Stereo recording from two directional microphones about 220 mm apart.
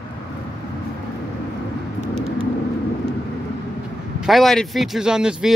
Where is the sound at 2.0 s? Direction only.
30° right (ahead or behind).